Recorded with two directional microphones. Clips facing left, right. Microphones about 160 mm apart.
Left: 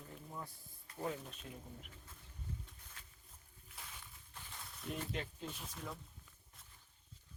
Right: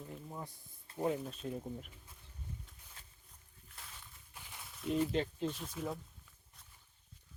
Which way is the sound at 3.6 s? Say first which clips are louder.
Even; centre (ahead or behind).